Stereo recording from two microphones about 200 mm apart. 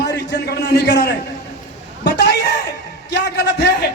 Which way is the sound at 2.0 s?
55° left (ahead or behind).